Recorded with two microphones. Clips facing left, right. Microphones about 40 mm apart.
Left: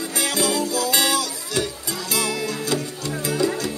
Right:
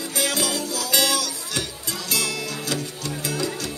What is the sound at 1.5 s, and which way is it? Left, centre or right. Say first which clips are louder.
Music: left 4 dB; left.